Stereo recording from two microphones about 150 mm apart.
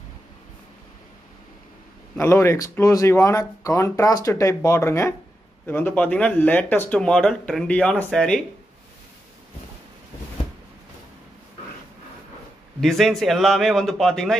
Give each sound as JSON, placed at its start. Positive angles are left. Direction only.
{"t": 2.1, "sound": "speech", "side_deg": 15}
{"t": 12.8, "sound": "a man's voice", "side_deg": 0}